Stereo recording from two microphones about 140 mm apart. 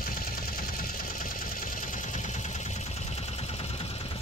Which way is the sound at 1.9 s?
60° left (ahead or behind).